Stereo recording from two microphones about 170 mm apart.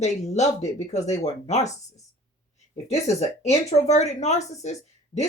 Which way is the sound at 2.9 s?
40° left (ahead or behind).